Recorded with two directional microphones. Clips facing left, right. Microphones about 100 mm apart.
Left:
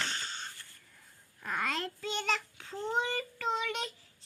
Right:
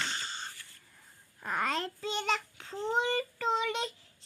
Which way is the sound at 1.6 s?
30° right (ahead or behind).